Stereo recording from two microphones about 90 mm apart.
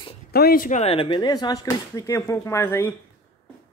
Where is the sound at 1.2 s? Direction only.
45° left (ahead or behind).